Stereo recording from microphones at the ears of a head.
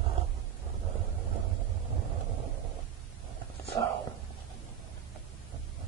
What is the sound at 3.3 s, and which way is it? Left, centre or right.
Whispering, right.